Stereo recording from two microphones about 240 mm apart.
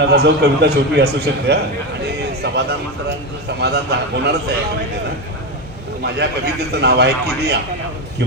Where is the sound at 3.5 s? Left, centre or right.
Right.